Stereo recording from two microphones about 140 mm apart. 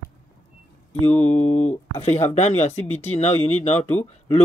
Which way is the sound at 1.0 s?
50° left (ahead or behind).